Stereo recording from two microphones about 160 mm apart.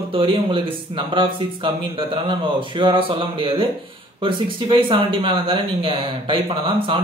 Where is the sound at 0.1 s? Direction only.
35° right (ahead or behind).